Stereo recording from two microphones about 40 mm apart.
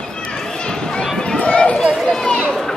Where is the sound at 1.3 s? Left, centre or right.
Left.